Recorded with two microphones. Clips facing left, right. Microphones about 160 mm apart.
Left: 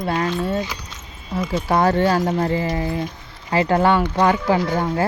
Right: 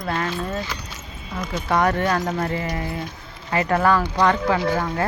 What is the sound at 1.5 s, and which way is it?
Speech, 30° left (ahead or behind).